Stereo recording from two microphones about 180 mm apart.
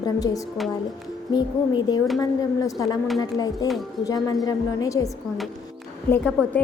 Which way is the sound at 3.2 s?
20° left (ahead or behind).